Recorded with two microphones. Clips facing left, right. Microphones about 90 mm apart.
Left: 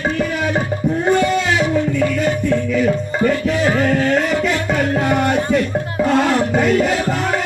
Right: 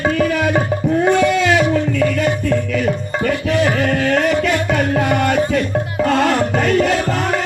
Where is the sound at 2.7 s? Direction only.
20° left (ahead or behind).